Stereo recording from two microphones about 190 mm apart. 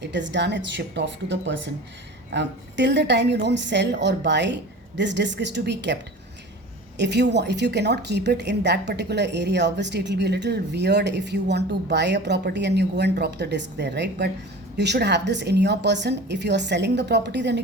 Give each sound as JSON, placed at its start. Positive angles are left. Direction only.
{"t": 0.0, "sound": "a woman's voice", "side_deg": -70}